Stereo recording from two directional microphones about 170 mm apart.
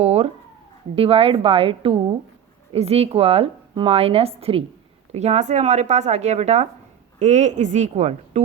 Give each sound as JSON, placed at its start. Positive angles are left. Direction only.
{"t": 0.0, "sound": "cat", "side_deg": -40}
{"t": 0.9, "sound": "a woman's voice", "side_deg": -35}